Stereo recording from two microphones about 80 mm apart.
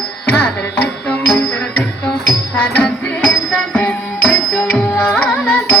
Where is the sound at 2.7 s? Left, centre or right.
Centre.